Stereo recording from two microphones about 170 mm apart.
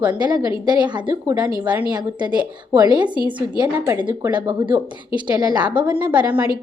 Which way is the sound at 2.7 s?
25° right (ahead or behind).